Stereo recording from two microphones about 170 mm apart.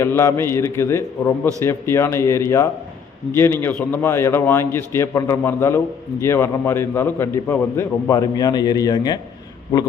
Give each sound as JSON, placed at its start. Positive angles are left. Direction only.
{"t": 0.0, "sound": "a man's voice", "side_deg": 15}